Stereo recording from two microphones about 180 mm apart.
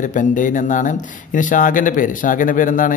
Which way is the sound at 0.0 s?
45° left (ahead or behind).